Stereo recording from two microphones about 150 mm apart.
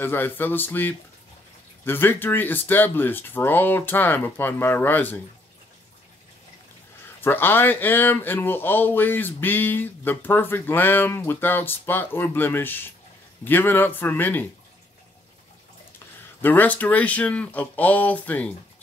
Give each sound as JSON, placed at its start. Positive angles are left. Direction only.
{"t": 0.0, "sound": "speech", "side_deg": 15}
{"t": 7.2, "sound": "speech", "side_deg": 15}
{"t": 16.3, "sound": "speech", "side_deg": 10}